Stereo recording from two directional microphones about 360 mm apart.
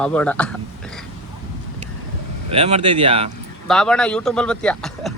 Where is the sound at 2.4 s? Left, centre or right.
Centre.